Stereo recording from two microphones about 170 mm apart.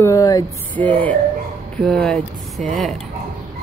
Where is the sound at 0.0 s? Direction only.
20° left (ahead or behind).